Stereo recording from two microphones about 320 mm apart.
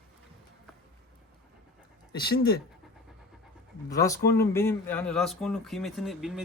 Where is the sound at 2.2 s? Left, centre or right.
Left.